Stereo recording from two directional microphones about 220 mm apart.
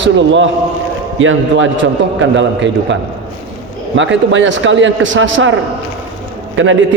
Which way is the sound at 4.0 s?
55° right (ahead or behind).